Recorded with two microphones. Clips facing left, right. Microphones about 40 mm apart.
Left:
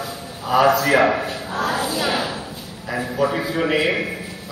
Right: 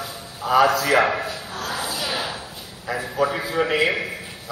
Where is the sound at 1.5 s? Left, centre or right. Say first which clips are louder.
Left 8 dB; left.